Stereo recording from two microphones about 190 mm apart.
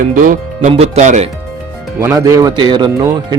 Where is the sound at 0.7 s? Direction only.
35° right (ahead or behind).